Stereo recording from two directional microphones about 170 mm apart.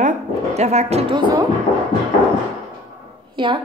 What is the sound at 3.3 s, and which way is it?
Speech, 30° right (ahead or behind).